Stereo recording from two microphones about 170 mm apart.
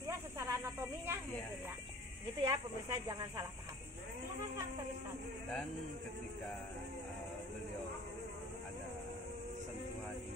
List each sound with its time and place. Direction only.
0.0 s snake: 20° right (ahead or behind)
2.4 s speech: 20° right (ahead or behind)